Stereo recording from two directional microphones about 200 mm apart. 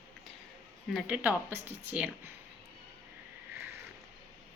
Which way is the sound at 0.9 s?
5° right (ahead or behind).